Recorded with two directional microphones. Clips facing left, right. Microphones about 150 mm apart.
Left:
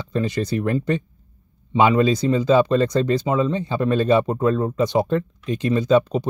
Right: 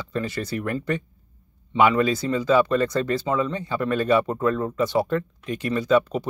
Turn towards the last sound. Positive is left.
turn(degrees=20)  # may be behind; listen again after turning